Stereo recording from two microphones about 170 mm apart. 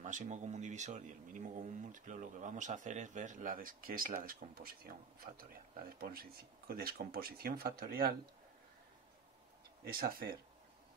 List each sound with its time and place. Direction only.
0.0 s speech: 45° right (ahead or behind); by 8.2 s 65° right (ahead or behind)
9.8 s speech: 60° right (ahead or behind)